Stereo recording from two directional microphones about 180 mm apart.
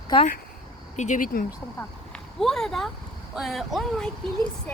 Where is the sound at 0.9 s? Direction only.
40° left (ahead or behind).